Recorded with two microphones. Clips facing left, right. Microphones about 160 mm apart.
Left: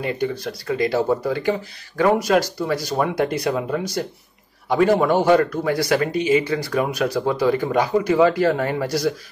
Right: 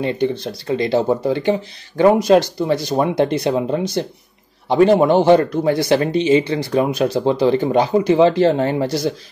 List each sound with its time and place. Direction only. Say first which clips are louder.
0.0 s speech: right 4 dB; 25° right (ahead or behind)